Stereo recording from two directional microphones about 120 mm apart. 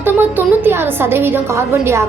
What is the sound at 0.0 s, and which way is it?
A woman's voice, 15° right (ahead or behind).